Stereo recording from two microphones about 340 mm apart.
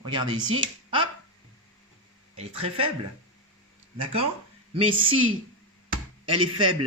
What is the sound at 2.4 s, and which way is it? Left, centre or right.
Speech, centre.